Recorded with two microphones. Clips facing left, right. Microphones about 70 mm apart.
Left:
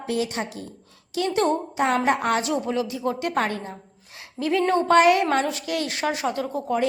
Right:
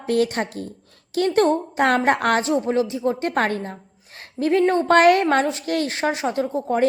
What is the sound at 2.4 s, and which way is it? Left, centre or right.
A woman's voice, right.